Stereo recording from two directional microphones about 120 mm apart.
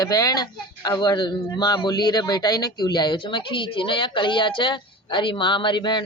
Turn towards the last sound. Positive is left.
turn(degrees=40)  # may be behind; listen again after turning